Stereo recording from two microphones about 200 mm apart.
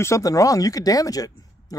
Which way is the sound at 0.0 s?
15° left (ahead or behind).